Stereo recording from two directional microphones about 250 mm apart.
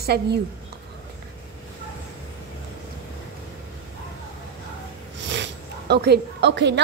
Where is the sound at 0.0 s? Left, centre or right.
Right.